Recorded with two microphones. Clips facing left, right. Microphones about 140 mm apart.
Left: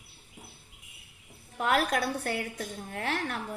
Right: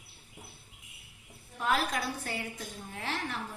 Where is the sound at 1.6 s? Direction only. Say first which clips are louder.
Left 4 dB; 60° left (ahead or behind).